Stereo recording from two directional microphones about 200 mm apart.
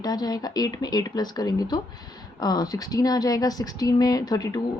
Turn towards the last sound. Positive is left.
turn(degrees=20)  # may be behind; listen again after turning